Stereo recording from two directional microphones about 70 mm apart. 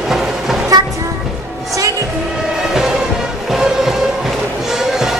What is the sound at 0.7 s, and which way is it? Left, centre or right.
Vehicle, right.